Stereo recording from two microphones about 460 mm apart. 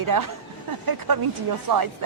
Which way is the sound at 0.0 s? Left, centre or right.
Right.